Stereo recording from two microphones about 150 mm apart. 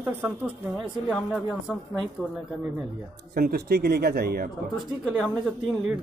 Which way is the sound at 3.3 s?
90° right.